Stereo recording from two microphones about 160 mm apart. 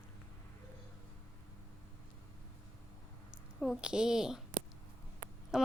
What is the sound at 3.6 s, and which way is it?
Speech, 5° right (ahead or behind).